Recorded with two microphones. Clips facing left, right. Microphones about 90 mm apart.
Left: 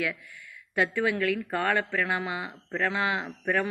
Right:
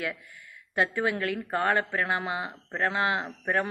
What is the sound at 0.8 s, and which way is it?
Speech, 30° right (ahead or behind).